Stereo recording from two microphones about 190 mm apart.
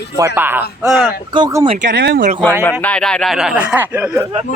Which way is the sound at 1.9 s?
60° right (ahead or behind).